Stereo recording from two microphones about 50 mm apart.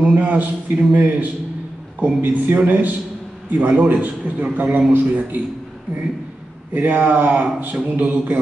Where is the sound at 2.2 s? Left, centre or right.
Right.